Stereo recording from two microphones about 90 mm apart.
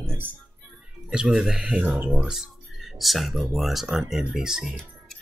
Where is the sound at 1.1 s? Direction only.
10° right (ahead or behind).